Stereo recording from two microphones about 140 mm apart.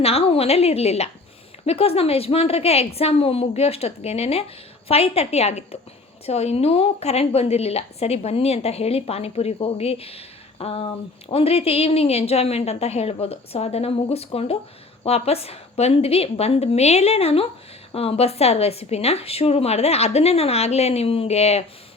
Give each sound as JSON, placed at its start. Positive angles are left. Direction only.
{"t": 0.0, "sound": "a woman's voice", "side_deg": 45}